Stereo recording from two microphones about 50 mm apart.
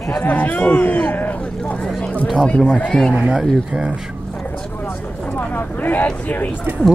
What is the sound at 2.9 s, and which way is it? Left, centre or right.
Speech, centre.